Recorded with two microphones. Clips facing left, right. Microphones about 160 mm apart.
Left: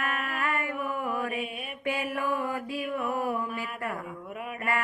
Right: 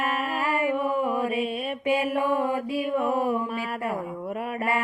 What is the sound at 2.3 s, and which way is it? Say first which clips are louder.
Mantra: right 6 dB; 30° right (ahead or behind).